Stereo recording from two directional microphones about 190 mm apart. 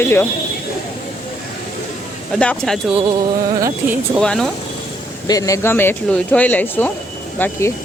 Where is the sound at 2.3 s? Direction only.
5° left (ahead or behind).